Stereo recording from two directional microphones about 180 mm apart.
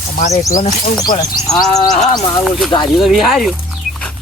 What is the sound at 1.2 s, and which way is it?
Speech, 20° left (ahead or behind).